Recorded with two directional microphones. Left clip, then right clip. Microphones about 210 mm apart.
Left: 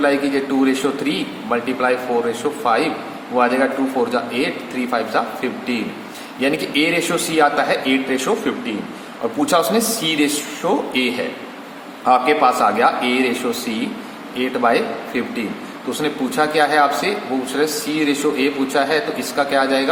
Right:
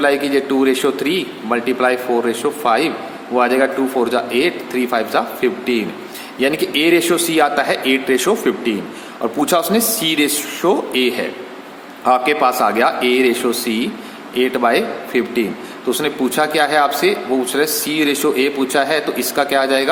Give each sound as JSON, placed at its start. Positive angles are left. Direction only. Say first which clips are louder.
{"t": 0.0, "sound": "a man's voice", "louder": "right 2 dB", "side_deg": -45}